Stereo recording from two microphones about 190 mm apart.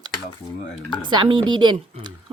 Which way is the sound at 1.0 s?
25° right (ahead or behind).